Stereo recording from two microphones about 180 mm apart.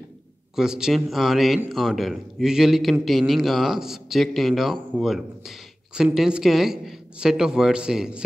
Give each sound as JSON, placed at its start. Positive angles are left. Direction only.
{"t": 0.6, "sound": "a man's voice", "side_deg": -5}